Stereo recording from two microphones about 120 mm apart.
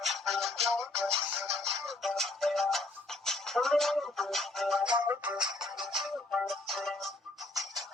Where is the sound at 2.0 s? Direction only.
Centre (ahead or behind).